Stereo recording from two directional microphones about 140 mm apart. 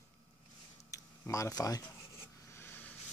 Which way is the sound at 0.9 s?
20° left (ahead or behind).